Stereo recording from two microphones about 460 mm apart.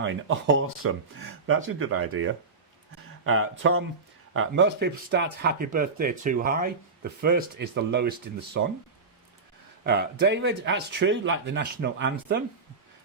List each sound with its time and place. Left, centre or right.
0.0 s speech: right
9.8 s speech: right